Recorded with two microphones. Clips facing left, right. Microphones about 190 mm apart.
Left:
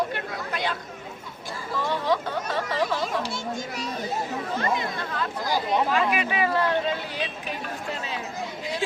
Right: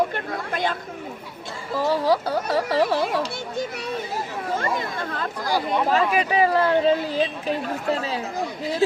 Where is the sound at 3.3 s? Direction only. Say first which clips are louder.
Right 3 dB; 60° right (ahead or behind).